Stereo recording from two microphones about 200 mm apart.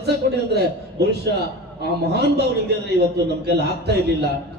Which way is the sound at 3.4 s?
55° right (ahead or behind).